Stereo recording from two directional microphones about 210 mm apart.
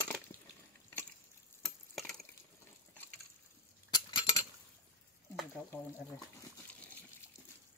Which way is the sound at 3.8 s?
20° left (ahead or behind).